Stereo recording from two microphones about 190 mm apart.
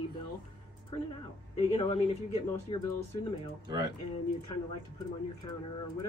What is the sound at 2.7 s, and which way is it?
Speech, 25° left (ahead or behind).